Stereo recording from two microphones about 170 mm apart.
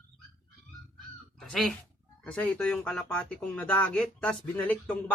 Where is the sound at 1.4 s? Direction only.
Centre (ahead or behind).